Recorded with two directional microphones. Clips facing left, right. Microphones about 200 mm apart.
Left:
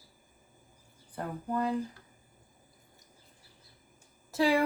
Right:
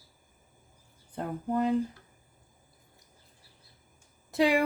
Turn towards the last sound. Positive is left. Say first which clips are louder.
# right 2 dB
turn(degrees=-15)  # may be behind; listen again after turning